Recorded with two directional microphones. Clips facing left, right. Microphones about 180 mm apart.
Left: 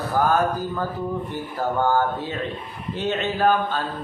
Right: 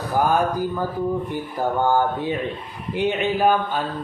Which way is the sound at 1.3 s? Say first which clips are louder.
Right 2 dB; 15° right (ahead or behind).